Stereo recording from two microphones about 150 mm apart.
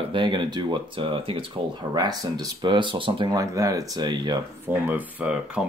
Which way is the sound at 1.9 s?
25° right (ahead or behind).